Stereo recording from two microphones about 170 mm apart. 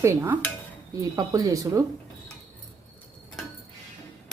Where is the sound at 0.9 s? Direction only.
20° right (ahead or behind).